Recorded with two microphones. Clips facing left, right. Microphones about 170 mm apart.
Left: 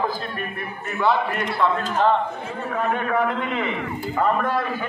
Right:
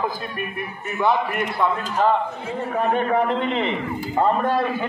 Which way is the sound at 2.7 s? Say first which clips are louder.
Right 3 dB; 30° right (ahead or behind).